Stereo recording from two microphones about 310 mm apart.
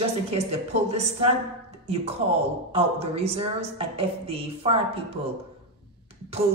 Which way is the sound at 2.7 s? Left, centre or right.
Centre.